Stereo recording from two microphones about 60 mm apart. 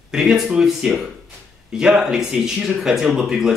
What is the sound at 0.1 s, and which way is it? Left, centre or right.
A man's voice, centre.